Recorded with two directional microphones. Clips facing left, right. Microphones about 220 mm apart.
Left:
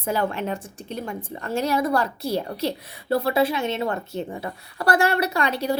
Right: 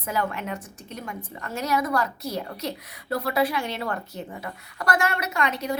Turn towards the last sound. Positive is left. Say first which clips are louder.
# left 4 dB
turn(degrees=30)  # may be behind; listen again after turning